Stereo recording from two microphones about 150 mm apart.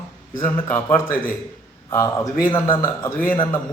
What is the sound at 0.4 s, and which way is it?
A man's voice, 15° left (ahead or behind).